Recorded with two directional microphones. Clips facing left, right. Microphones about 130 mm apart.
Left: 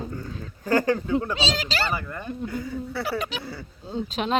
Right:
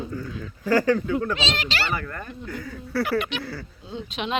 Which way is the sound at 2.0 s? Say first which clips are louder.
Left 3 dB; 20° left (ahead or behind).